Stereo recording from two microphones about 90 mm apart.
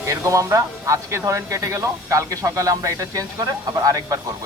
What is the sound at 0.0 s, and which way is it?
Speech, 35° right (ahead or behind).